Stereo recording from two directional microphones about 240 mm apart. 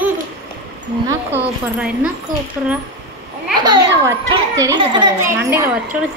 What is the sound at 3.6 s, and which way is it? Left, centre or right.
A child's voice, centre.